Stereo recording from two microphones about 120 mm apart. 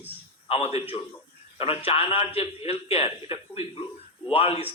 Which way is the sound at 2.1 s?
55° left (ahead or behind).